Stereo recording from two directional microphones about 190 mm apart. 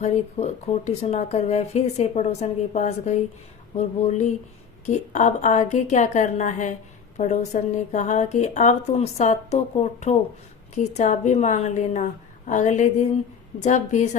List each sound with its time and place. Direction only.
0.0 s speech: 35° left (ahead or behind)